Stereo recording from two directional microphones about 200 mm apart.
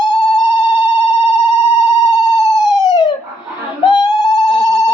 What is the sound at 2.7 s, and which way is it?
Police car, 20° left (ahead or behind).